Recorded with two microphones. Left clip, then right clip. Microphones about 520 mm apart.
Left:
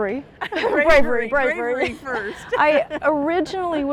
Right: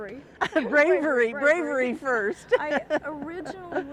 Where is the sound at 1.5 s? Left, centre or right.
Right.